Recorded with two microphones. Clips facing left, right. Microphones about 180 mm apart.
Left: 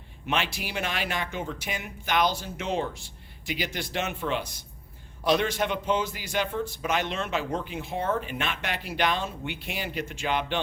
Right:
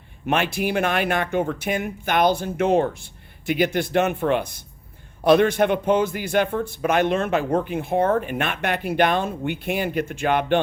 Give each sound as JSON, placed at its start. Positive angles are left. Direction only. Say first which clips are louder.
{"t": 0.3, "sound": "a man's voice", "louder": "right 8 dB", "side_deg": -55}